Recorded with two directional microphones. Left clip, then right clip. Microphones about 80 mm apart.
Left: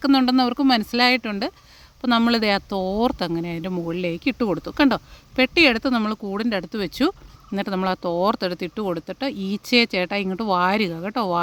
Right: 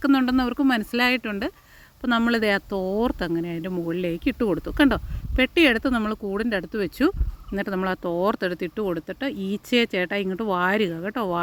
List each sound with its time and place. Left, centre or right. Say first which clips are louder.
0.0 s speech: left 3 dB; left
0.8 s speech: left 3 dB; left